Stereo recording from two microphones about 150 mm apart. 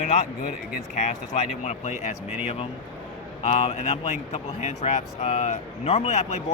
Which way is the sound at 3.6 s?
45° left (ahead or behind).